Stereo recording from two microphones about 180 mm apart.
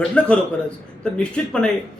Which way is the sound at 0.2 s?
5° left (ahead or behind).